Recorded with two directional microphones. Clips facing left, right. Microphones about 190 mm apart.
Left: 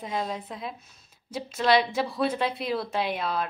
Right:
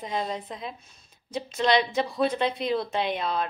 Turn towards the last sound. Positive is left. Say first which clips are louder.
# right 1 dB
turn(degrees=5)  # may be behind; listen again after turning